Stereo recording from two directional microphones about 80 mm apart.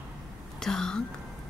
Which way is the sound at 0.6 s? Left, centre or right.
Centre.